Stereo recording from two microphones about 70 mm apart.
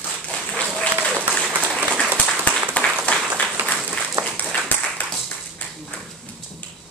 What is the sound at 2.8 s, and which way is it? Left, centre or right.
Applause, left.